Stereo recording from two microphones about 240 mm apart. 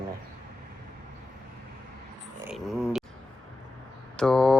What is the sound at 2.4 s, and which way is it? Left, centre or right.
Speech, centre.